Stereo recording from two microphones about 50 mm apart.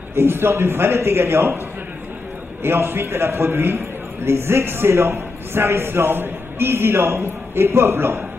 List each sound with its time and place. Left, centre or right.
0.1 s a man's voice: right
2.6 s a man's voice: right